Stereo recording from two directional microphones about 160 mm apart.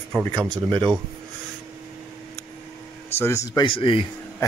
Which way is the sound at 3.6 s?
30° left (ahead or behind).